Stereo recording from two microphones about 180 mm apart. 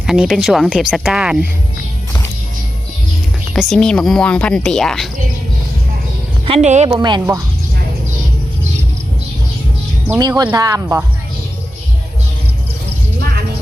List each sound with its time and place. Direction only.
0.0 s speech: centre (ahead or behind)
3.5 s speech: centre (ahead or behind)
6.4 s speech: 35° right (ahead or behind)
6.9 s speech: 25° right (ahead or behind)
10.2 s speech: 20° right (ahead or behind)